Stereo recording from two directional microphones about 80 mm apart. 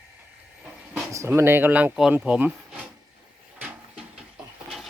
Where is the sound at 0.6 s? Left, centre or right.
Centre.